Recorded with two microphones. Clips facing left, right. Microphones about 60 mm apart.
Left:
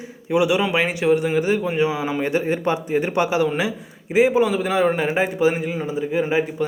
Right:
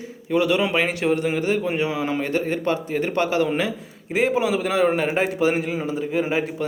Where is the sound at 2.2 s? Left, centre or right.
Centre.